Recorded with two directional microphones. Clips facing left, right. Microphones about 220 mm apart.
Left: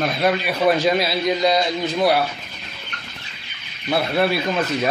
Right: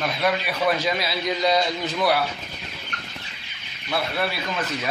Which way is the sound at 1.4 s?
20° left (ahead or behind).